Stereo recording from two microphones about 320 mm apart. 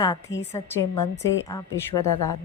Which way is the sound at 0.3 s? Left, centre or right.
Left.